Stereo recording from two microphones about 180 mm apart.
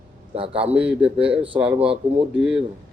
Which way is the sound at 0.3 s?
30° right (ahead or behind).